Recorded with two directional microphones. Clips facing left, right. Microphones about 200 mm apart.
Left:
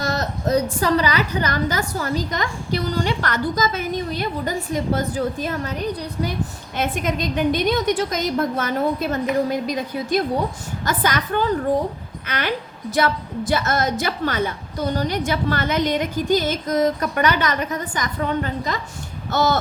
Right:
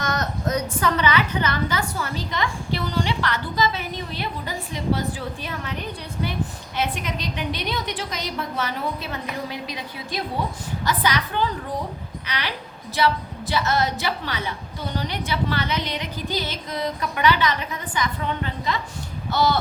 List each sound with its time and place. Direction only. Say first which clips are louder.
0.0 s a woman's voice: left 2 dB; 30° left (ahead or behind)